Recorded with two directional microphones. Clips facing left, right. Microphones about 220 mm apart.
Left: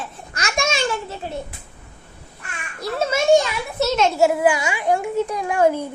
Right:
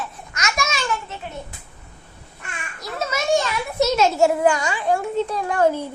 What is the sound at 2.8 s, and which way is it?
Children playing, 30° left (ahead or behind).